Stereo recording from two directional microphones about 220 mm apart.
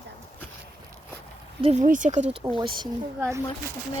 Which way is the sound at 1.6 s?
35° right (ahead or behind).